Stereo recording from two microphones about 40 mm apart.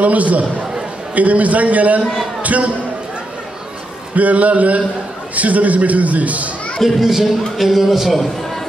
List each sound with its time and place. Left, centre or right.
0.0 s a man's voice: right
4.1 s a man's voice: right
6.8 s a man's voice: centre